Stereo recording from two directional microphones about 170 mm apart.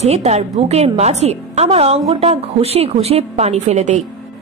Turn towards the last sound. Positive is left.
turn(degrees=-45)  # may be behind; listen again after turning